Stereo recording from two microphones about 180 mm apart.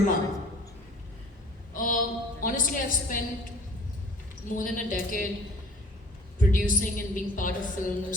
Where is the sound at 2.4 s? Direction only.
50° left (ahead or behind).